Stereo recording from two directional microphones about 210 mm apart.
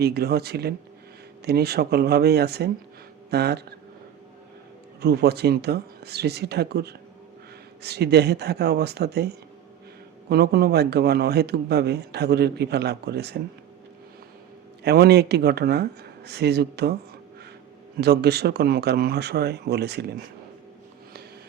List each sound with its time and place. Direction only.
0.0 s a man's voice: 50° right (ahead or behind)
4.9 s a man's voice: 50° right (ahead or behind)
14.8 s a man's voice: 50° right (ahead or behind)
17.9 s a man's voice: 50° right (ahead or behind)